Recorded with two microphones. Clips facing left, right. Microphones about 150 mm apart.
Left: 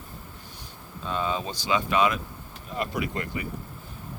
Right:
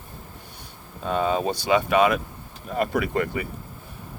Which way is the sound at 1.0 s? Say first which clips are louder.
Right 6 dB; 55° right (ahead or behind).